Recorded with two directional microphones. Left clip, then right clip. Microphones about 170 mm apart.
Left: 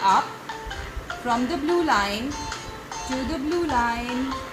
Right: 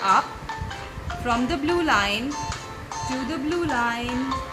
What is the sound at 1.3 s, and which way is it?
Speech, 15° right (ahead or behind).